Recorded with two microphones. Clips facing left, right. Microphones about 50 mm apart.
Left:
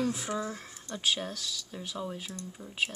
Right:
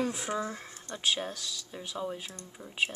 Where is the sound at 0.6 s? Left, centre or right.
Right.